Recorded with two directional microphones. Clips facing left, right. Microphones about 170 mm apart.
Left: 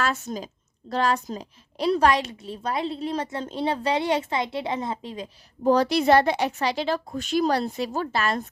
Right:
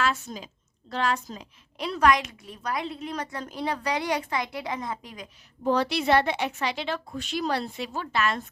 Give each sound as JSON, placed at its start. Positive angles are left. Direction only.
{"t": 0.0, "sound": "a woman's voice", "side_deg": 40}